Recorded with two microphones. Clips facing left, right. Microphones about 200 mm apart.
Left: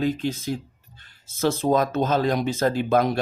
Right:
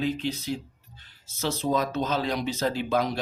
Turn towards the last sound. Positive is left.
turn(degrees=50)  # may be behind; listen again after turning